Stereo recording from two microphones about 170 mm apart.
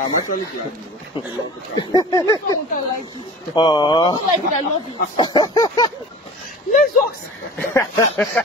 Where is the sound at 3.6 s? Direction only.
25° left (ahead or behind).